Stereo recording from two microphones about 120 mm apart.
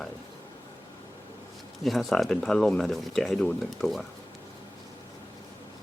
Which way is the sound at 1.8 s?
Centre (ahead or behind).